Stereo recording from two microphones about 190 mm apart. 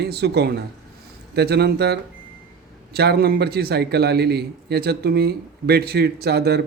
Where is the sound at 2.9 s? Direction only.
55° right (ahead or behind).